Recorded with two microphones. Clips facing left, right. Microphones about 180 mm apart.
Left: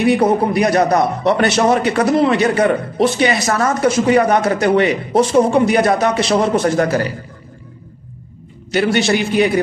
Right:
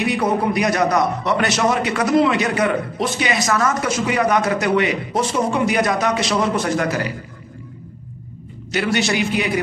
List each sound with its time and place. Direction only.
0.5 s a man's voice: 30° left (ahead or behind)
8.7 s a man's voice: 35° left (ahead or behind)